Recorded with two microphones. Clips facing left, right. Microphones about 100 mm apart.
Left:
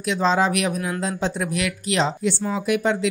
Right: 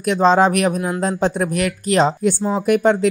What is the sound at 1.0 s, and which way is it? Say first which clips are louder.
Speech: right 8 dB; 45° right (ahead or behind).